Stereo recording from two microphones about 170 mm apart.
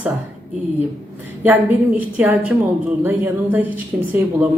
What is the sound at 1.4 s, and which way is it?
Speech, 10° right (ahead or behind).